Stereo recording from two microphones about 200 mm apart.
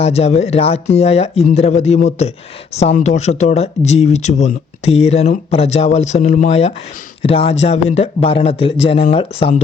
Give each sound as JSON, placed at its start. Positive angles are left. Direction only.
{"t": 0.0, "sound": "a man's voice", "side_deg": 30}